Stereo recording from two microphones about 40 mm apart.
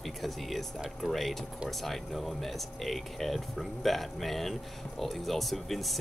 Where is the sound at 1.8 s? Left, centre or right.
Centre.